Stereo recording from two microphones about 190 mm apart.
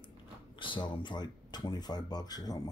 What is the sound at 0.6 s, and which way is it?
A man's voice, 25° left (ahead or behind).